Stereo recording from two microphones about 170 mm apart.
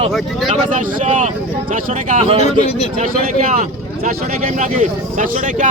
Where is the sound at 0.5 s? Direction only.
50° right (ahead or behind).